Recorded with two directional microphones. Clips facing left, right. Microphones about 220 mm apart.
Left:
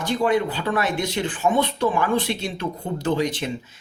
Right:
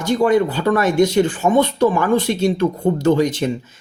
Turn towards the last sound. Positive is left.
turn(degrees=-45)  # may be behind; listen again after turning